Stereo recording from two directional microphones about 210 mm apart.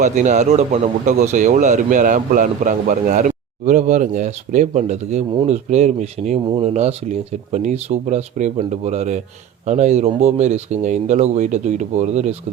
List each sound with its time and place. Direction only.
0.0 s speech: 35° right (ahead or behind)